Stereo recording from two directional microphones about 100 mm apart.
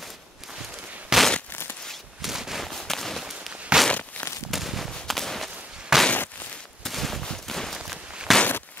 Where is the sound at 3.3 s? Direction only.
10° right (ahead or behind).